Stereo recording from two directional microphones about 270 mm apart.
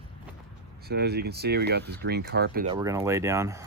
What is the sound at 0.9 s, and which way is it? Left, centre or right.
Speech, right.